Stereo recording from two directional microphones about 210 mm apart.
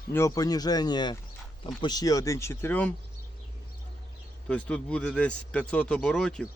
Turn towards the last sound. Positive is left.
turn(degrees=5)  # may be behind; listen again after turning